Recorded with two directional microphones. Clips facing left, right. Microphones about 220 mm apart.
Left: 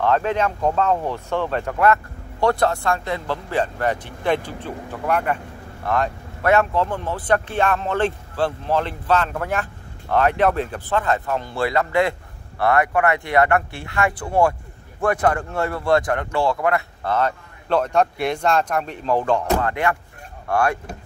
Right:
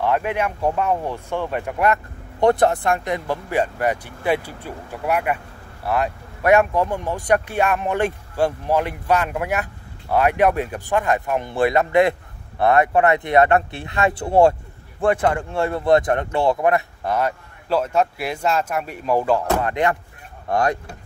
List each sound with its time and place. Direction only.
0.0 s speech: 15° right (ahead or behind)
15.3 s speech: 15° right (ahead or behind)
19.7 s speech: 20° right (ahead or behind)